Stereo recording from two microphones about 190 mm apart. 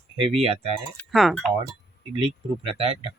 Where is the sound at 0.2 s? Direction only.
30° right (ahead or behind).